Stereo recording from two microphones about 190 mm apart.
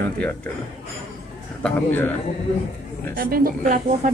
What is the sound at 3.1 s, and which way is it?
Speech, 50° right (ahead or behind).